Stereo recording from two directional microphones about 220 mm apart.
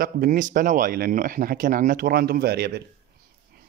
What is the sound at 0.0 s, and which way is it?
Speech, 40° right (ahead or behind).